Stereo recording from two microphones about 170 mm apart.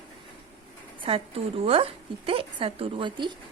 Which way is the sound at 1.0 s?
35° right (ahead or behind).